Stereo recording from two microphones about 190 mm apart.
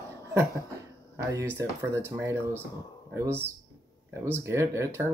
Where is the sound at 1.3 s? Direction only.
15° right (ahead or behind).